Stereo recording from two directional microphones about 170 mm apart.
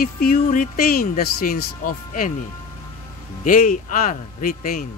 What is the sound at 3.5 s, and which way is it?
Speech, 50° left (ahead or behind).